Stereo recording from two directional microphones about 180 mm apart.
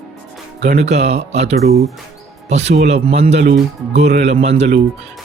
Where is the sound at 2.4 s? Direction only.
40° right (ahead or behind).